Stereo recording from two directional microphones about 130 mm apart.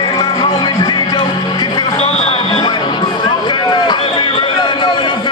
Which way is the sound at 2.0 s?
55° left (ahead or behind).